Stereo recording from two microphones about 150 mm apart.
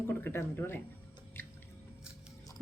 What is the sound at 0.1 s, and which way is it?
Speech, 15° left (ahead or behind).